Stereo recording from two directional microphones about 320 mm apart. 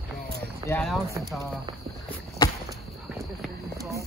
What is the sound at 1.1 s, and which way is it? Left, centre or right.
Speech, centre.